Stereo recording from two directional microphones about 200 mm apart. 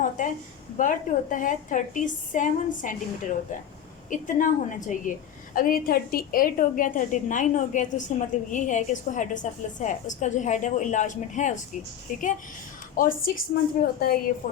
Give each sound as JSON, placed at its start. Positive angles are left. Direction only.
{"t": 0.0, "sound": "a sound", "side_deg": 40}
{"t": 0.8, "sound": "a woman's voice", "side_deg": 40}
{"t": 13.0, "sound": "a woman's voice", "side_deg": 45}